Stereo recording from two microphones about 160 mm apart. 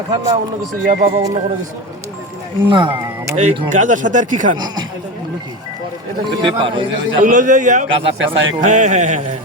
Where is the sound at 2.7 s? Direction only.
30° right (ahead or behind).